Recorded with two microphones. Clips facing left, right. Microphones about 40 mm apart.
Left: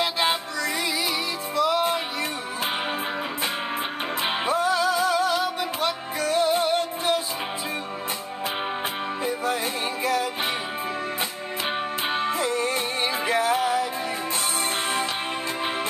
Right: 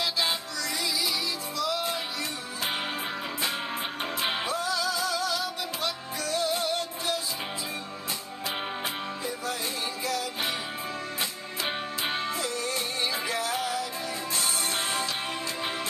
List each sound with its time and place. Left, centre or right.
0.0 s music: left
4.2 s music: left
9.2 s music: left
12.3 s music: left